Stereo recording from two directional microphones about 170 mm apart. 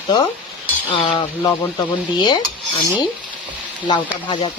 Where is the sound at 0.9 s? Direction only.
30° left (ahead or behind).